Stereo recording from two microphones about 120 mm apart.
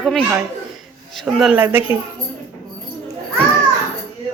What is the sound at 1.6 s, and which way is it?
Speech, 15° right (ahead or behind).